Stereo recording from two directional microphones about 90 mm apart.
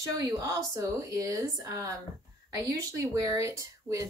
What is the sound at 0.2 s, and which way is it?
Speech, 40° right (ahead or behind).